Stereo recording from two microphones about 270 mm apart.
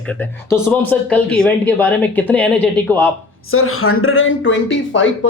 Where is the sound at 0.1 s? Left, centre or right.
Centre.